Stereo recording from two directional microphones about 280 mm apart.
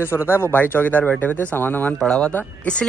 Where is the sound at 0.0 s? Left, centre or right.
Centre.